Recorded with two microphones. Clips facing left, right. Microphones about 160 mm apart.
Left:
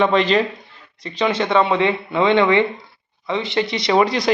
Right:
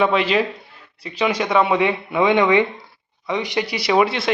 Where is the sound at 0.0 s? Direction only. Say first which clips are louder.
Left 2 dB; 10° right (ahead or behind).